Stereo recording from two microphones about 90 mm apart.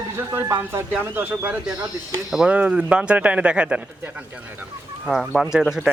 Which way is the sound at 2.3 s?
10° right (ahead or behind).